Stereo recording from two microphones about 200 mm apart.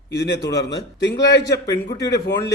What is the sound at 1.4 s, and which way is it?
Speech, 15° left (ahead or behind).